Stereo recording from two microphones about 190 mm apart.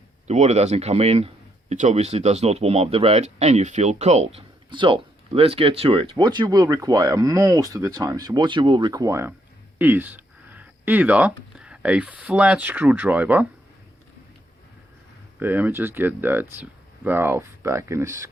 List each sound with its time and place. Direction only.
0.3 s speech: 35° right (ahead or behind); by 13.5 s 10° right (ahead or behind)
15.4 s speech: 10° right (ahead or behind)